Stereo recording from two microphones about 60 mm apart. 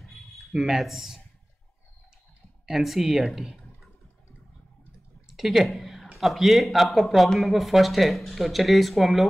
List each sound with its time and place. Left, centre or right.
0.0 s a sound: centre
2.6 s speech: centre
5.3 s a woman's voice: centre